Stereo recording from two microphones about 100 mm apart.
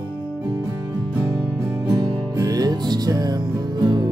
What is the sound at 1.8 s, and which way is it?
Music, 40° right (ahead or behind).